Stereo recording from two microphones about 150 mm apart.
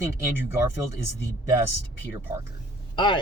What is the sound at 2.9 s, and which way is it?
Speech, 30° left (ahead or behind).